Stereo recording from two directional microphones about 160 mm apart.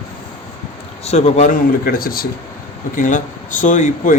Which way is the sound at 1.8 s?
65° left (ahead or behind).